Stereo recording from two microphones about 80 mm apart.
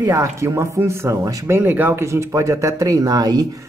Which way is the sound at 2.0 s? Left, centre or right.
Right.